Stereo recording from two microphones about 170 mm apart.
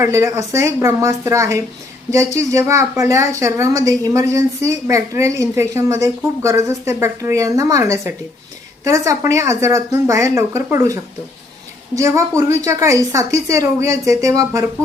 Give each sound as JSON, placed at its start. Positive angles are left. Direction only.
{"t": 0.0, "sound": "a woman's voice", "side_deg": -15}